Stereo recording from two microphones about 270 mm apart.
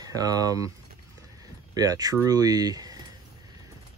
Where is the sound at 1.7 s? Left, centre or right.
Centre.